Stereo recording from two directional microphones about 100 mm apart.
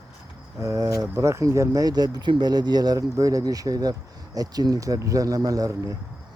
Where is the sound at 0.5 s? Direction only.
30° right (ahead or behind).